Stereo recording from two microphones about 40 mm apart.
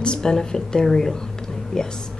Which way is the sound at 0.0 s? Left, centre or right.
Centre.